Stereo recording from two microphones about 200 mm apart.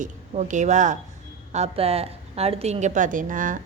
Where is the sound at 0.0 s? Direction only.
40° right (ahead or behind).